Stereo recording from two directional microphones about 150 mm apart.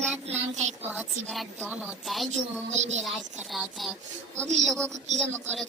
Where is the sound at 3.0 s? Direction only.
Centre (ahead or behind).